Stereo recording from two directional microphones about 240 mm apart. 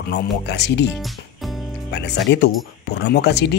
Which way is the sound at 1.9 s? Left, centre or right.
Left.